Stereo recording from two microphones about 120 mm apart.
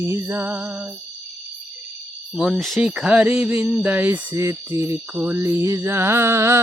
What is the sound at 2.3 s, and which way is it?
Speech, 5° right (ahead or behind).